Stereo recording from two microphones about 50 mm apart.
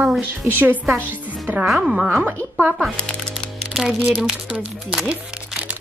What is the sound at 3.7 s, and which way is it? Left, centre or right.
Speech, centre.